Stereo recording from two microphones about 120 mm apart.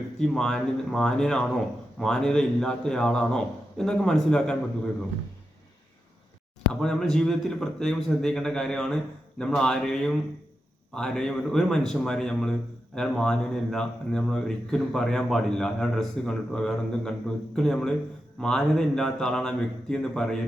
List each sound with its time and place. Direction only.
0.2 s a man's voice: 5° left (ahead or behind)
6.8 s a man's voice: 5° left (ahead or behind)